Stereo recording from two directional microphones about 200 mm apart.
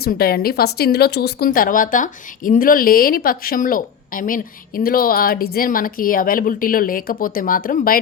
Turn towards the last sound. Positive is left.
turn(degrees=45)  # may be behind; listen again after turning